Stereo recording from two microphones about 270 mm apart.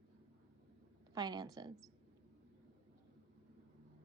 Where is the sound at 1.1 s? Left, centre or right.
Centre.